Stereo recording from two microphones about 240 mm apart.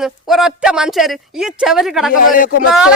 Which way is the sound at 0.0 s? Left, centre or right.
Centre.